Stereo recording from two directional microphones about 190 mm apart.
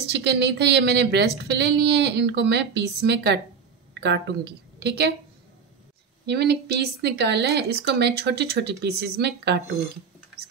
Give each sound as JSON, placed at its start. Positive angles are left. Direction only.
{"t": 0.1, "sound": "a woman's voice", "side_deg": -60}
{"t": 6.2, "sound": "speech", "side_deg": -60}